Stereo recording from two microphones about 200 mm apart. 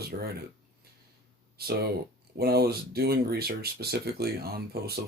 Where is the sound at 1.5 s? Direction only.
50° right (ahead or behind).